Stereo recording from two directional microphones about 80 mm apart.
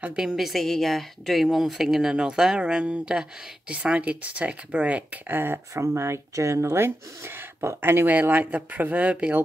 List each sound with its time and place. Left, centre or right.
0.0 s a woman's voice: centre